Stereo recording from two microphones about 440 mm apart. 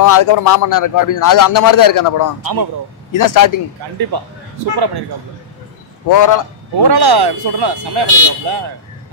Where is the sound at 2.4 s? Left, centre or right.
Right.